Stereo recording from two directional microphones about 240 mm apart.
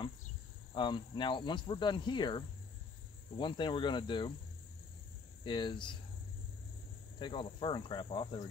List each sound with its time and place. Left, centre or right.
0.7 s speech: centre
5.4 s speech: centre
7.2 s speech: left